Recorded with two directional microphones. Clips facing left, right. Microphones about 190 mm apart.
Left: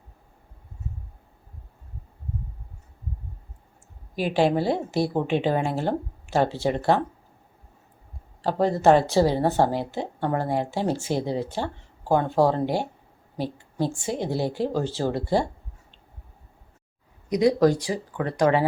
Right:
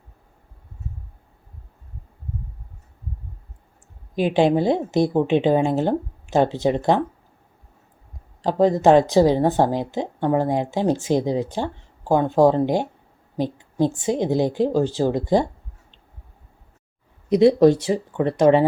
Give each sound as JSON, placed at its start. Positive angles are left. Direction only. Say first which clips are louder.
{"t": 4.5, "sound": "speech", "louder": "right 5 dB", "side_deg": -20}
{"t": 8.4, "sound": "a woman's voice", "louder": "right 5 dB", "side_deg": -15}
{"t": 17.2, "sound": "speech", "louder": "right 5 dB", "side_deg": -25}